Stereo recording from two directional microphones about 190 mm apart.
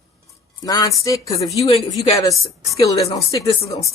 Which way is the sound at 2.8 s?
15° left (ahead or behind).